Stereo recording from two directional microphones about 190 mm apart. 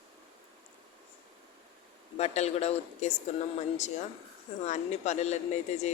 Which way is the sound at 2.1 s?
35° left (ahead or behind).